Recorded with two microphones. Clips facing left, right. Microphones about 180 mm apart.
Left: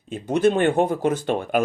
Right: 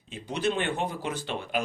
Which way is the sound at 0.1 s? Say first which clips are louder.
Left 10 dB; 50° left (ahead or behind).